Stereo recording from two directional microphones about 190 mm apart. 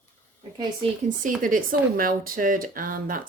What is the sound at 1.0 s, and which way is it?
Speech, 45° right (ahead or behind).